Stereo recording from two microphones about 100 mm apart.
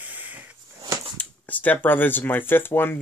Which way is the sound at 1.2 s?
15° left (ahead or behind).